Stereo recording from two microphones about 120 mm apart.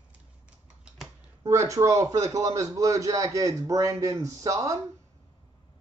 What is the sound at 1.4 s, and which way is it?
A man's voice, 25° right (ahead or behind).